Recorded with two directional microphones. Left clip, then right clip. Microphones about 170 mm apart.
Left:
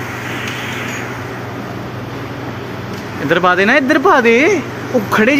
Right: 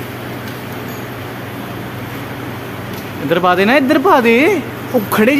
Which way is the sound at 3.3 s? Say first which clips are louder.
Left 1 dB; 15° right (ahead or behind).